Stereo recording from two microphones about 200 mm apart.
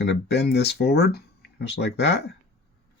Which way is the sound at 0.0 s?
55° left (ahead or behind).